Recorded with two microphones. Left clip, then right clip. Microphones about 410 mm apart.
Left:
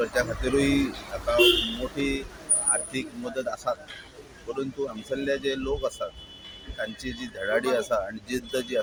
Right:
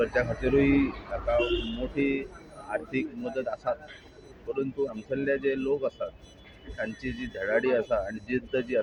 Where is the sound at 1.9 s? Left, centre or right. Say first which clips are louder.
Right 1 dB; right.